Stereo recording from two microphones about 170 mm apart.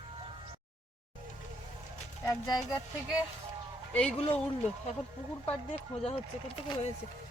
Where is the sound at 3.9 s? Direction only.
5° left (ahead or behind).